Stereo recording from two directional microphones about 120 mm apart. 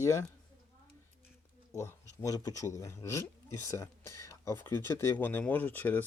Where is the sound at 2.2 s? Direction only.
30° left (ahead or behind).